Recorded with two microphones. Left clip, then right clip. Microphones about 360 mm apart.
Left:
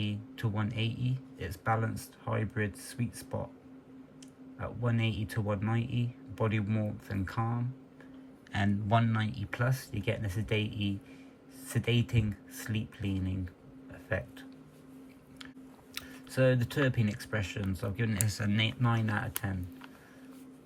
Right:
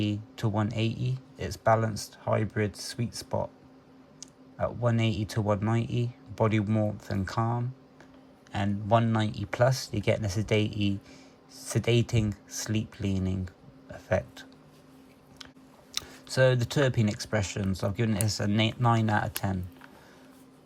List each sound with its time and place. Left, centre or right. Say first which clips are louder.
0.0 s speech: right 6 dB; centre
8.5 s speech: right 4 dB; centre
16.0 s a sound: right 8 dB; centre
16.6 s speech: right 4 dB; centre